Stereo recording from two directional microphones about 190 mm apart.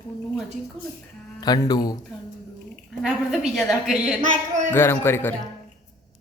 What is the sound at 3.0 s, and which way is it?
Speech, centre (ahead or behind).